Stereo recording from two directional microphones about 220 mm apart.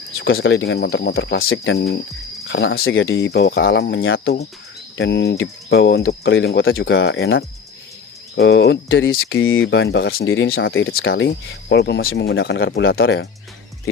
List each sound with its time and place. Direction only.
0.2 s speech: 55° left (ahead or behind)
11.1 s speech: 60° left (ahead or behind)